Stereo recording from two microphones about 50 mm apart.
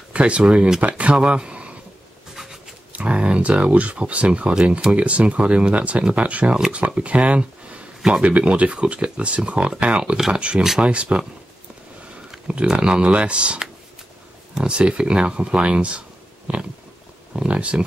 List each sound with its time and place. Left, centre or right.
0.1 s speech: right
2.3 s a sound: centre
2.9 s speech: right
10.1 s speech: centre
10.8 s speech: right
12.7 s speech: right